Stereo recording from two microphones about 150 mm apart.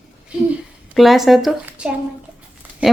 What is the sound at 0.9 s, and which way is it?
A woman's voice, centre (ahead or behind).